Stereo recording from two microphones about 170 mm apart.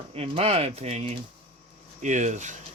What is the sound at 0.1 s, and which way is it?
Speech, 35° right (ahead or behind).